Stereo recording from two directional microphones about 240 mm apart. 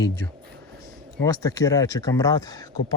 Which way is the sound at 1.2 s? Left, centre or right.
Centre.